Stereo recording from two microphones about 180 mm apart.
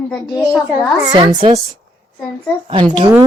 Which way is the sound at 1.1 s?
25° right (ahead or behind).